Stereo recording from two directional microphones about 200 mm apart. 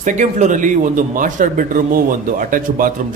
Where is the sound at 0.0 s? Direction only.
35° right (ahead or behind).